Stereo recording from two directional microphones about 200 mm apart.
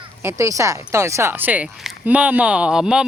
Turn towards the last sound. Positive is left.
turn(degrees=-5)  # may be behind; listen again after turning